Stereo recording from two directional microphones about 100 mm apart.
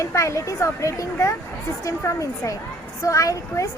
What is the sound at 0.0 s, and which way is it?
Speech, 30° left (ahead or behind).